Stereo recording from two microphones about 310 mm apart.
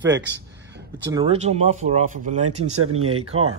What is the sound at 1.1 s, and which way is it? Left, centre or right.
Speech, centre.